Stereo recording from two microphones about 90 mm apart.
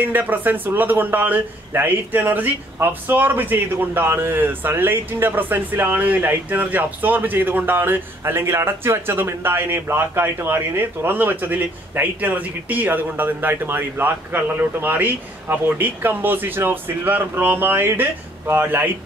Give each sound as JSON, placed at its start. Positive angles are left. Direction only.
{"t": 0.0, "sound": "speech", "side_deg": -20}